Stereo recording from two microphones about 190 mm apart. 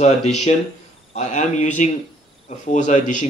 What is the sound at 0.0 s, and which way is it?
Speech, 35° left (ahead or behind).